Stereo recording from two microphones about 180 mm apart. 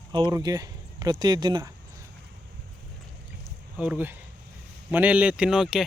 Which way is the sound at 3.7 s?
5° right (ahead or behind).